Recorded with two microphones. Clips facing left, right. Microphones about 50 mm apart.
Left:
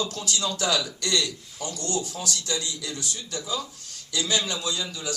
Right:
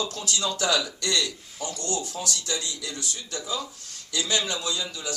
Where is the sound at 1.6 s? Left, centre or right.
Right.